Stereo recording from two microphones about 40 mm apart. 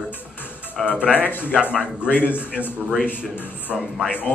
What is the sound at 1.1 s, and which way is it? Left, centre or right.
Speech, left.